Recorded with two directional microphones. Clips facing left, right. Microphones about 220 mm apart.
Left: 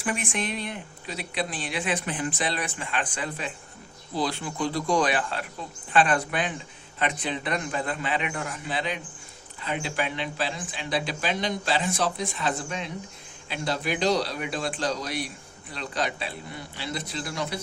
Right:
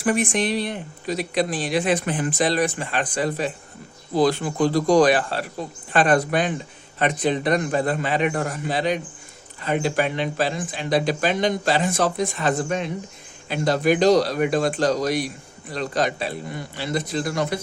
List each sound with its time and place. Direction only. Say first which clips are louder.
0.0 s speech: right 8 dB; 40° right (ahead or behind)